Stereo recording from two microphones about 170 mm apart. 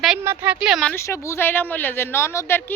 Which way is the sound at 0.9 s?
15° left (ahead or behind).